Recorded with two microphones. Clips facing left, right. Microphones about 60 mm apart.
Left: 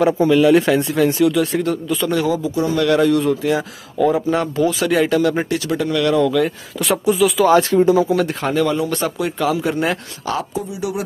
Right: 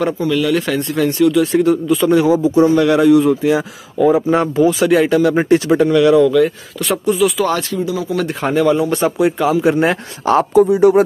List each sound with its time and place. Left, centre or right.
0.2 s speech: centre
2.1 s a man's voice: right
3.0 s speech: centre
5.5 s a man's voice: right
5.9 s speech: centre
7.7 s speech: left
8.2 s speech: centre; by 9.9 s right
10.5 s speech: right